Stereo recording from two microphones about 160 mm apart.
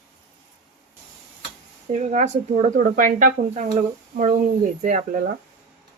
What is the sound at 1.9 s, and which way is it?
Speech, 50° right (ahead or behind).